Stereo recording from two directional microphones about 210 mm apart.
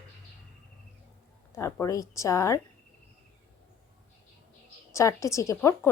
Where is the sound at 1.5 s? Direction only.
15° left (ahead or behind).